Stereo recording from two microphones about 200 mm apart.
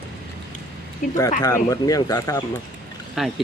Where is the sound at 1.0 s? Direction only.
40° left (ahead or behind).